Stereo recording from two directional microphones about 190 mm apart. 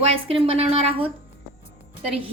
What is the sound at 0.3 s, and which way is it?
Speech, 30° right (ahead or behind).